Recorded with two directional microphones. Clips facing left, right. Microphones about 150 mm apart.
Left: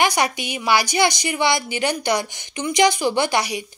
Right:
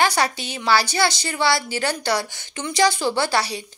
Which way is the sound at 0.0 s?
15° left (ahead or behind).